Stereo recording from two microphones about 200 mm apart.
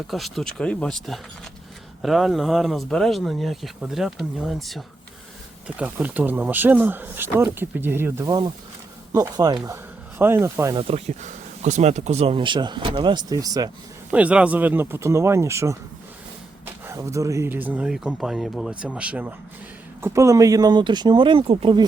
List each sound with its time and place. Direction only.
0.1 s speech: centre (ahead or behind)
10.8 s speech: 30° right (ahead or behind)
14.1 s speech: 5° right (ahead or behind)
16.8 s speech: 15° right (ahead or behind)